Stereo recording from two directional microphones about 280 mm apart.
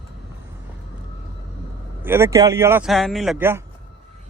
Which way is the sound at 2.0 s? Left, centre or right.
Centre.